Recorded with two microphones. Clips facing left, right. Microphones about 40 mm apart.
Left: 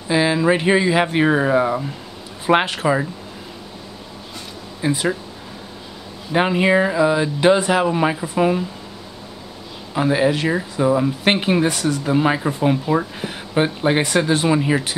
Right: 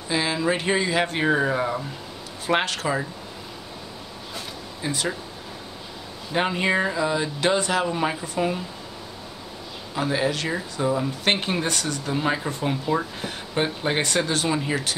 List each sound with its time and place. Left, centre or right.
0.1 s speech: left
4.8 s speech: centre
6.3 s speech: centre
9.9 s speech: centre
12.0 s speech: centre